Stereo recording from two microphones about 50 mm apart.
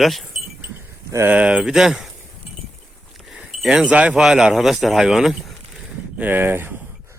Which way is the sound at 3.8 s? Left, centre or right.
Right.